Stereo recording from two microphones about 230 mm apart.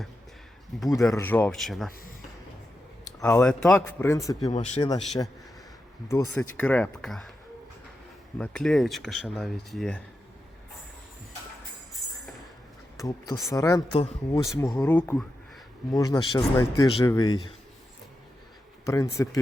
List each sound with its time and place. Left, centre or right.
0.7 s speech: centre
3.2 s speech: centre
4.5 s speech: left
6.1 s speech: centre
8.4 s speech: centre
13.0 s speech: centre
18.9 s speech: centre